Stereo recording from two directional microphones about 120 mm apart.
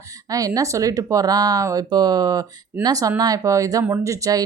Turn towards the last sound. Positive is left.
turn(degrees=-30)  # may be behind; listen again after turning